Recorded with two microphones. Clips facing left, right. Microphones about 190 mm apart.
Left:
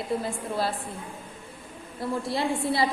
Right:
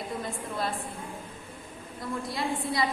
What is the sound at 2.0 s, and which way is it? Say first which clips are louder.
Speech: left 5 dB; 30° left (ahead or behind).